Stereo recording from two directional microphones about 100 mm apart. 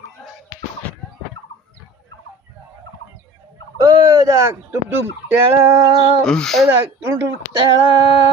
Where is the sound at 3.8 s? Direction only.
35° right (ahead or behind).